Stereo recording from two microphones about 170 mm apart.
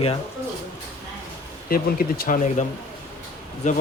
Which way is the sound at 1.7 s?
60° left (ahead or behind).